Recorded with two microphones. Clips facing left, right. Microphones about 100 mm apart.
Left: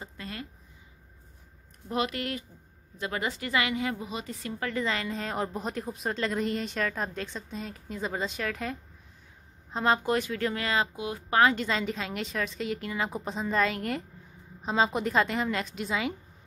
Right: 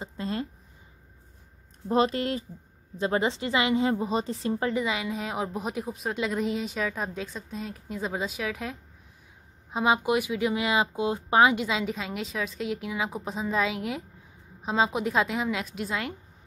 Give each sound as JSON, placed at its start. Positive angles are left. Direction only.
{"t": 0.0, "sound": "a sound", "side_deg": -30}
{"t": 1.9, "sound": "a woman's voice", "side_deg": -30}
{"t": 4.7, "sound": "speech", "side_deg": -10}